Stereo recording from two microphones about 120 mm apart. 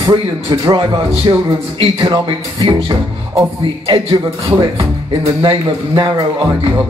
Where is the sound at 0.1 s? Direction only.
45° right (ahead or behind).